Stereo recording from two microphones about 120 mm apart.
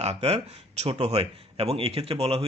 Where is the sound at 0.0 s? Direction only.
60° right (ahead or behind).